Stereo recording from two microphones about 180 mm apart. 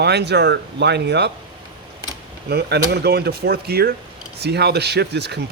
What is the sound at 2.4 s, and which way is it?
Speech, 65° right (ahead or behind).